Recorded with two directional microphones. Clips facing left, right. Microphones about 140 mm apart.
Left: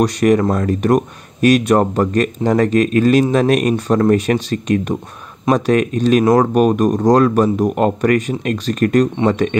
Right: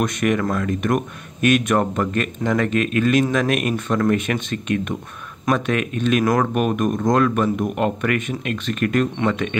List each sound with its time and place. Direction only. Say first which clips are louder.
0.0 s speech: left 7 dB; 35° left (ahead or behind)